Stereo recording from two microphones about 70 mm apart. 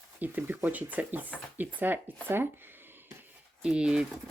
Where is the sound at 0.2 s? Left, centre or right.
Right.